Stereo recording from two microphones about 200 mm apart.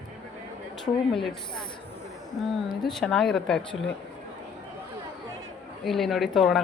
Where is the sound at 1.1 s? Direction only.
Centre (ahead or behind).